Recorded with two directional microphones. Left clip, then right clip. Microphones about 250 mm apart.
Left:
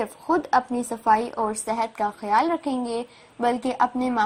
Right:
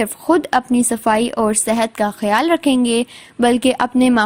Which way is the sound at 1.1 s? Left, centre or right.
Right.